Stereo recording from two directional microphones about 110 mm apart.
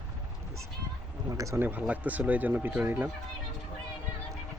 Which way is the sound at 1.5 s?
15° right (ahead or behind).